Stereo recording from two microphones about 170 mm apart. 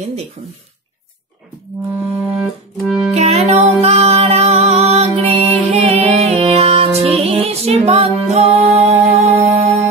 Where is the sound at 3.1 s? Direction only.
40° right (ahead or behind).